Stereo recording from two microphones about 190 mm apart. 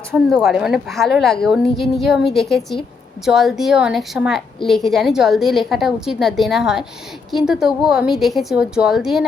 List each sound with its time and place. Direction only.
0.1 s a woman's voice: centre (ahead or behind)